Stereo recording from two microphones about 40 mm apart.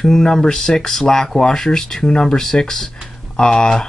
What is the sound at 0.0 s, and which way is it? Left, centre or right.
Speech, centre.